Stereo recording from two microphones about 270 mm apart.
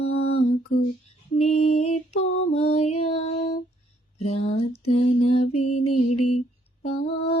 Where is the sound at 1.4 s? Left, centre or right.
Left.